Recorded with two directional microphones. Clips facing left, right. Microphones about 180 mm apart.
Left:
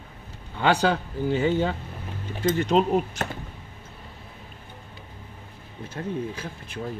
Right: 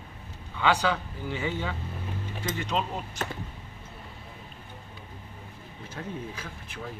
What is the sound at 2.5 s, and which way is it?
Speech, 50° left (ahead or behind).